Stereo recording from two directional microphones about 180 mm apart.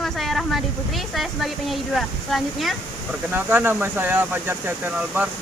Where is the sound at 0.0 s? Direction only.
Centre (ahead or behind).